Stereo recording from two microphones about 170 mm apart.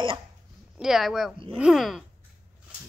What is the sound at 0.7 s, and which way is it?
Speech, centre (ahead or behind).